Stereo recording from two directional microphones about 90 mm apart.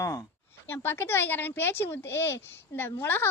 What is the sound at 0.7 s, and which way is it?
A woman's voice, 25° left (ahead or behind).